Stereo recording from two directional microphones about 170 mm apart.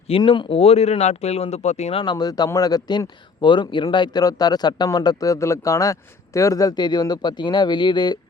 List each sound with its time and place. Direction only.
0.1 s speech: 30° left (ahead or behind)